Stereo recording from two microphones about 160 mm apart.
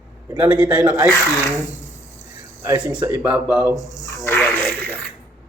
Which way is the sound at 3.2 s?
10° right (ahead or behind).